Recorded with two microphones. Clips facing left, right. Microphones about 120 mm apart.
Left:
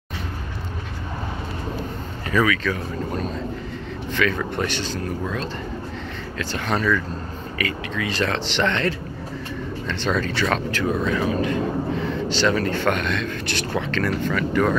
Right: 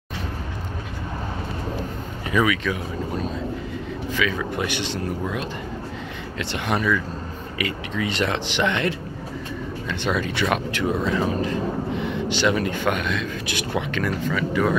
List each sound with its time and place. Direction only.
2.3 s speech: 15° right (ahead or behind)
4.1 s speech: 5° right (ahead or behind)